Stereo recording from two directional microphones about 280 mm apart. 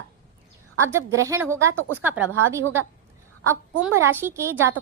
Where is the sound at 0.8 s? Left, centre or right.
Centre.